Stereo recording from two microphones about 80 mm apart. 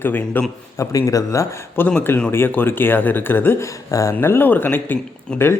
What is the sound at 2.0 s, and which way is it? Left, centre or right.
A woman's voice, left.